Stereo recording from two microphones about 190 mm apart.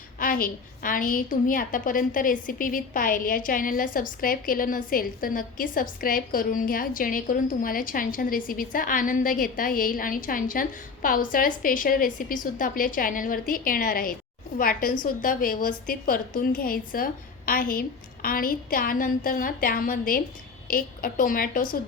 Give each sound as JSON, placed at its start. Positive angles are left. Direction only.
{"t": 0.2, "sound": "a woman's voice", "side_deg": 50}